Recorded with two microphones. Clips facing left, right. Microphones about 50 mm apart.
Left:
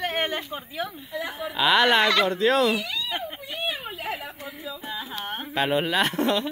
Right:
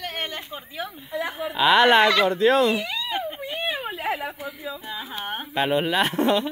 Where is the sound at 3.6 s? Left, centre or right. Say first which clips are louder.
Right 4 dB; right.